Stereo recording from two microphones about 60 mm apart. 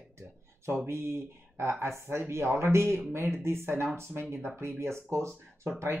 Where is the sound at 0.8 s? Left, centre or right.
Right.